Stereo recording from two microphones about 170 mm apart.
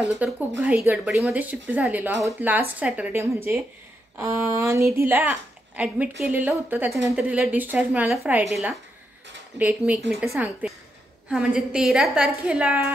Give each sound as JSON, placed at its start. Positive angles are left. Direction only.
{"t": 0.2, "sound": "a woman's voice", "side_deg": -10}